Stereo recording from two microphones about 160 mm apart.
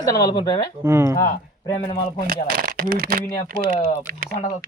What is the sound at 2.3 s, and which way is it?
Speech, 65° right (ahead or behind).